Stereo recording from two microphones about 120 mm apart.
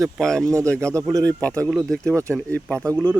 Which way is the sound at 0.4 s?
25° right (ahead or behind).